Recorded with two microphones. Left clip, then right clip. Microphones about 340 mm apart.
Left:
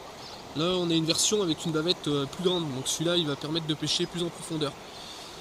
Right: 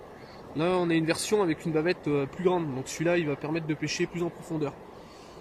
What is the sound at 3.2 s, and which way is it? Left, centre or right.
Speech, centre.